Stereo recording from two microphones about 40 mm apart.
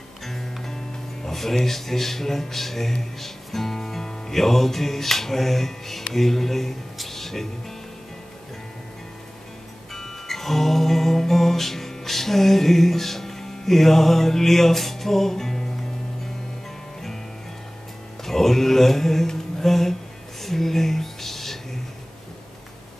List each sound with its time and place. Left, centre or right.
0.2 s music: centre
1.2 s speech: centre
9.9 s music: centre
18.2 s mantra: centre
20.4 s a sound: centre